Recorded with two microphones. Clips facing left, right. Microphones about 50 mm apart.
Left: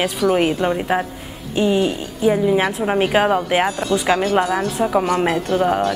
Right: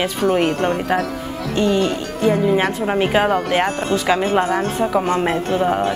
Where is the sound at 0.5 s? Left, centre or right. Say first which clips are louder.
Even; right.